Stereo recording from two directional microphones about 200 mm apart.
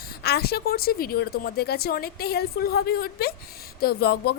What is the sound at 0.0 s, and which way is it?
A woman's voice, 50° left (ahead or behind).